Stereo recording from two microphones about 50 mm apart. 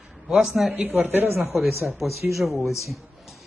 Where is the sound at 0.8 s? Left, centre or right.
Right.